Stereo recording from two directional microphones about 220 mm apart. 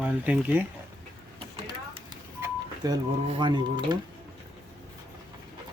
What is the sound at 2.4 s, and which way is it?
Speech, 15° right (ahead or behind).